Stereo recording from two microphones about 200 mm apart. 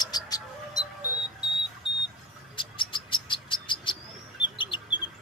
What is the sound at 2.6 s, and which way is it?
Cricket, 25° left (ahead or behind).